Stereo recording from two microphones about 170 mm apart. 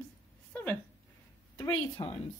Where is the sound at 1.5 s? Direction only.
25° left (ahead or behind).